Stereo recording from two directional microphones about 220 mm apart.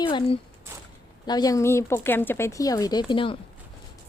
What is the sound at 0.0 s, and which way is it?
Speech, 20° left (ahead or behind).